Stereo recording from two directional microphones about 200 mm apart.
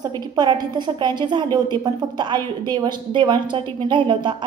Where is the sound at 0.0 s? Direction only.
20° right (ahead or behind).